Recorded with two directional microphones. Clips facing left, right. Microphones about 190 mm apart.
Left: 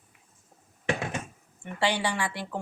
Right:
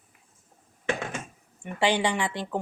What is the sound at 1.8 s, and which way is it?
Speech, 20° right (ahead or behind).